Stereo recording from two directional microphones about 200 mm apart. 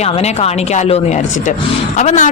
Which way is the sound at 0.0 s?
35° left (ahead or behind).